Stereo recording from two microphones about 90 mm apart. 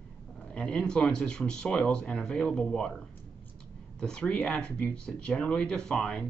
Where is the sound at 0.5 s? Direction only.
10° left (ahead or behind).